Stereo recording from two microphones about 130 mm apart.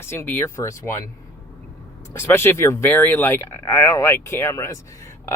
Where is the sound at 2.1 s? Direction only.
20° left (ahead or behind).